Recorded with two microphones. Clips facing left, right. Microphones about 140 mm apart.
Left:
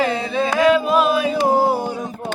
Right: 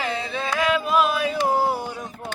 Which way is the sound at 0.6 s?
35° left (ahead or behind).